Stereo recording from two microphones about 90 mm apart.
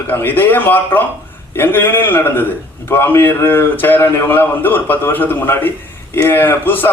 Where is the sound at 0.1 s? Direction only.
20° left (ahead or behind).